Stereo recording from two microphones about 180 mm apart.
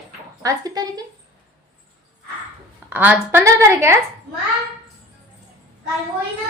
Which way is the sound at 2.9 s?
10° right (ahead or behind).